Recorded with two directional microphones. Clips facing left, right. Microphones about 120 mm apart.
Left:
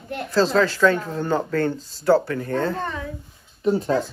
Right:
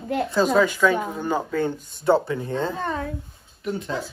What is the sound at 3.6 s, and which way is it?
Speech, 30° left (ahead or behind).